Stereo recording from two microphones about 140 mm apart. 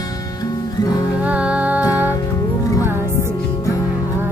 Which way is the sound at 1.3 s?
10° right (ahead or behind).